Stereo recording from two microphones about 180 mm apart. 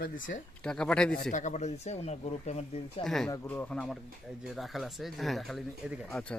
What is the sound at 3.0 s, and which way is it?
Speech, centre (ahead or behind).